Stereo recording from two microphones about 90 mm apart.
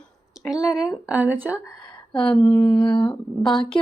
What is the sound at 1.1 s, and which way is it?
Speech, 20° right (ahead or behind).